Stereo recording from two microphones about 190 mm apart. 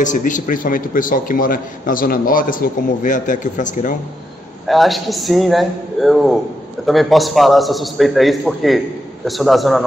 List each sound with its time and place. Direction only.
0.0 s a man's voice: 40° left (ahead or behind)
4.6 s a man's voice: centre (ahead or behind)